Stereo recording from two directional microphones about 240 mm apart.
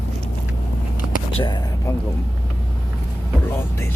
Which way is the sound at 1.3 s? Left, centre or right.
Centre.